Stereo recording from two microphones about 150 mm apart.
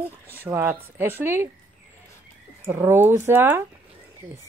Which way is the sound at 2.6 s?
15° right (ahead or behind).